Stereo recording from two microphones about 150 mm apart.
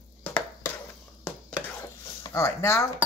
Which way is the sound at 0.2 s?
10° left (ahead or behind).